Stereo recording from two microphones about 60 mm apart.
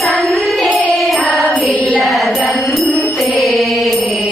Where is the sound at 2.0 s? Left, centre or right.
Centre.